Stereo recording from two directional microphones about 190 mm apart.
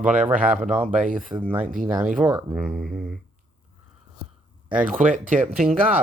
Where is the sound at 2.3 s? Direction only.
15° right (ahead or behind).